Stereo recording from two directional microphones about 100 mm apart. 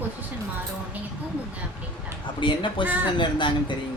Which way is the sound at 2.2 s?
55° left (ahead or behind).